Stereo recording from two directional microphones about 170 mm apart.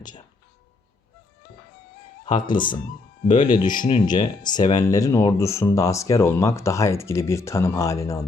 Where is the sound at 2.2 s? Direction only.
25° left (ahead or behind).